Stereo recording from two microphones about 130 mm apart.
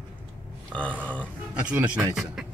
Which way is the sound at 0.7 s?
10° left (ahead or behind).